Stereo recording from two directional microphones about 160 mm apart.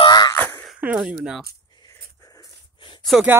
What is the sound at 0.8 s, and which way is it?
Speech, 5° right (ahead or behind).